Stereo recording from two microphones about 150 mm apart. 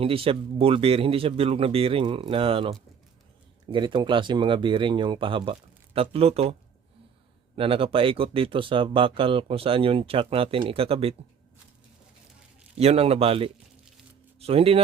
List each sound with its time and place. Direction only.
0.0 s speech: 40° right (ahead or behind)
12.7 s speech: 40° right (ahead or behind)